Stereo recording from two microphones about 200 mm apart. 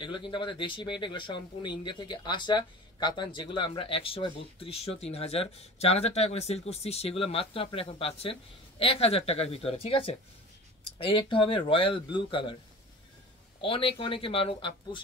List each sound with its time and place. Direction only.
0.0 s speech: 25° left (ahead or behind)
13.6 s speech: 25° left (ahead or behind)